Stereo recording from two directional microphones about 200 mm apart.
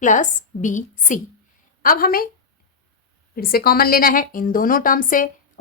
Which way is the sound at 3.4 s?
50° left (ahead or behind).